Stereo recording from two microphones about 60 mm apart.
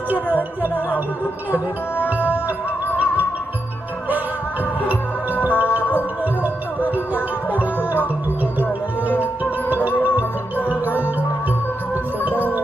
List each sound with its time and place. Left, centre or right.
0.6 s music: right
2.0 s music: right
4.9 s music: right
6.8 s music: right
7.6 s music: left
9.2 s music: right
10.6 s music: left
12.3 s music: left